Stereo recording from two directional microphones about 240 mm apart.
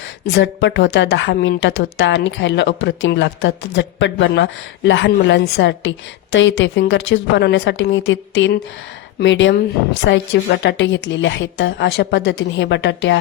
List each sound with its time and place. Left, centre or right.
0.3 s a woman's voice: left